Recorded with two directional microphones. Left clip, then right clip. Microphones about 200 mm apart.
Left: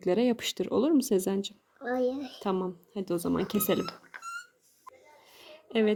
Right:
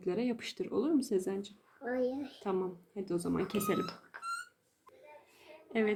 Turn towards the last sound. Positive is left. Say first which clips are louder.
# left 6 dB
turn(degrees=35)  # may be behind; listen again after turning